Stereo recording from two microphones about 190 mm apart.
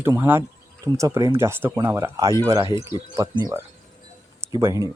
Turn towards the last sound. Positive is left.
turn(degrees=-20)  # may be behind; listen again after turning